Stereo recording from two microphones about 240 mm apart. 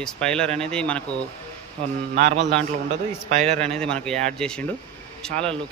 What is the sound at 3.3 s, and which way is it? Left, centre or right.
Speech, right.